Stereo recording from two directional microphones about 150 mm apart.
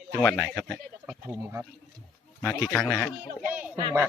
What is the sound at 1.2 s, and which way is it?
Speech, 15° right (ahead or behind).